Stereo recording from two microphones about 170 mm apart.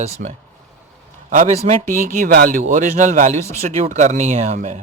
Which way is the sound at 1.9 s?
60° right (ahead or behind).